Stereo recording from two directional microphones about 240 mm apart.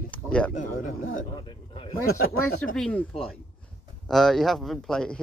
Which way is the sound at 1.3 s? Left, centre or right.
Left.